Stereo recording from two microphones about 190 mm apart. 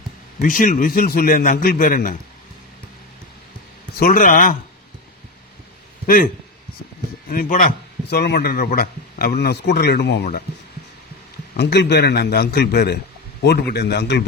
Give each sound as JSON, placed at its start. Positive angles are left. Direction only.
{"t": 0.3, "sound": "a man's voice", "side_deg": 45}
{"t": 3.9, "sound": "a man's voice", "side_deg": 50}
{"t": 6.1, "sound": "a man's voice", "side_deg": 50}
{"t": 8.1, "sound": "speech", "side_deg": 55}
{"t": 11.5, "sound": "speech", "side_deg": 60}